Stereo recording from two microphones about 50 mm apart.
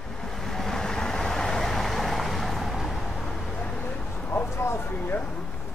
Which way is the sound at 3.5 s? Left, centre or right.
Left.